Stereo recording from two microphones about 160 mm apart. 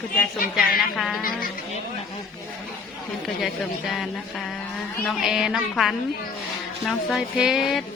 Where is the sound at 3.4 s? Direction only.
Centre (ahead or behind).